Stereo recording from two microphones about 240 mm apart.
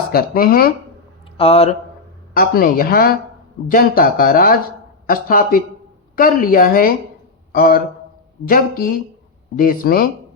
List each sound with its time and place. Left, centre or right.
0.1 s speech: left
1.4 s speech: left
2.3 s a man's voice: left